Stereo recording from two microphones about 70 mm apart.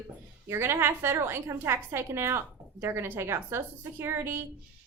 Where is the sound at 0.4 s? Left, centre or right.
Right.